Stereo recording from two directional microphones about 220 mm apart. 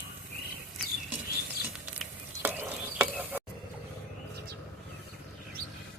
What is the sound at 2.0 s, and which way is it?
Stir, 10° right (ahead or behind).